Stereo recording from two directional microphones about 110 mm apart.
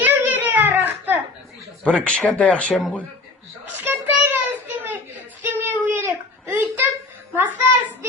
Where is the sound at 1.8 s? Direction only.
10° left (ahead or behind).